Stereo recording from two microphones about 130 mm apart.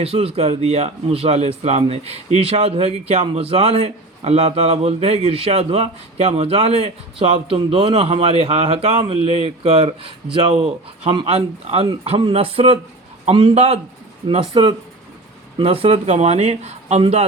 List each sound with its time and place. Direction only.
0.0 s a man's voice: 45° right (ahead or behind)
11.3 s a man's voice: 50° right (ahead or behind)
14.3 s a man's voice: 40° right (ahead or behind)